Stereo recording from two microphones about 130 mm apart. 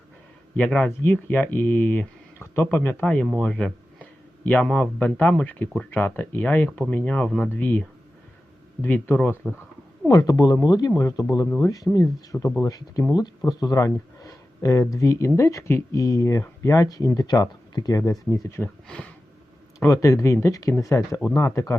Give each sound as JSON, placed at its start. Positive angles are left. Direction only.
{"t": 0.5, "sound": "speech", "side_deg": 5}
{"t": 0.9, "sound": "speech", "side_deg": 15}
{"t": 3.2, "sound": "speech", "side_deg": 0}
{"t": 3.5, "sound": "a sound", "side_deg": 10}
{"t": 4.4, "sound": "speech", "side_deg": 10}
{"t": 10.1, "sound": "speech", "side_deg": 25}
{"t": 18.9, "sound": "speech", "side_deg": 5}
{"t": 19.9, "sound": "speech", "side_deg": 25}